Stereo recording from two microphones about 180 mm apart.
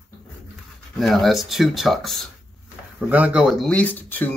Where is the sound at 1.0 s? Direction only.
Centre (ahead or behind).